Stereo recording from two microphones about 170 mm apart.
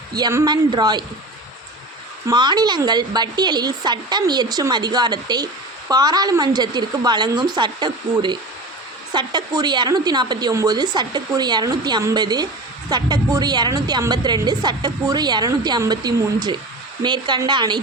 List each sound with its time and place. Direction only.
0.1 s a woman's voice: 20° right (ahead or behind)
2.2 s a woman's voice: 25° right (ahead or behind)